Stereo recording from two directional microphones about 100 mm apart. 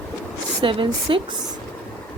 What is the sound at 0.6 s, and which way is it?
Speech, 60° right (ahead or behind).